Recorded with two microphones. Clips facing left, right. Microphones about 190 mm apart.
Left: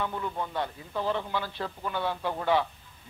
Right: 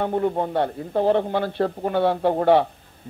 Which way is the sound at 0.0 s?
55° right (ahead or behind).